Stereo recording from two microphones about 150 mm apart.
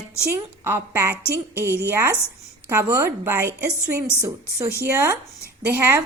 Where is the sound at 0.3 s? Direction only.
15° right (ahead or behind).